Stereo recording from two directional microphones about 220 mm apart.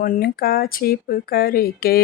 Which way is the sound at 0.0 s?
40° left (ahead or behind).